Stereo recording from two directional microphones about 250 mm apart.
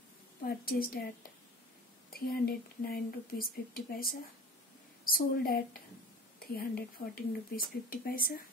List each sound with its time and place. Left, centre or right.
0.5 s speech: left
2.1 s speech: left